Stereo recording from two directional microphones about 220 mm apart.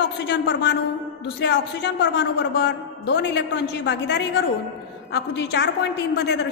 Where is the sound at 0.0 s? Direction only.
55° left (ahead or behind).